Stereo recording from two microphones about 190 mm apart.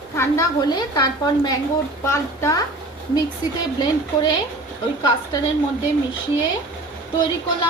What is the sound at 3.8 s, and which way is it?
Speech, 20° left (ahead or behind).